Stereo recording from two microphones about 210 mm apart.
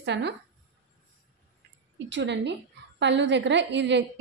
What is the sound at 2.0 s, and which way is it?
A woman's voice, 55° right (ahead or behind).